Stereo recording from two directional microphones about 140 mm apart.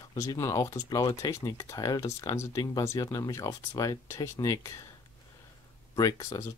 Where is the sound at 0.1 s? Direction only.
25° left (ahead or behind).